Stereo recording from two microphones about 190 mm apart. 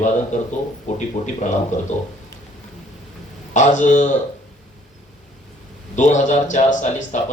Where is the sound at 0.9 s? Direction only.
40° left (ahead or behind).